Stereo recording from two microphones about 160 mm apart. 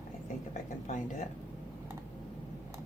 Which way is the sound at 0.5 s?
50° left (ahead or behind).